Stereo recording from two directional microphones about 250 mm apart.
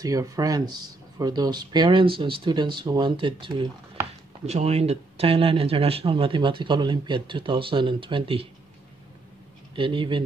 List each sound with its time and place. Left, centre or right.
0.0 s speech: centre
9.8 s speech: centre